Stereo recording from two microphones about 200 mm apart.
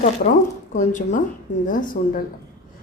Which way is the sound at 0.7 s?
40° left (ahead or behind).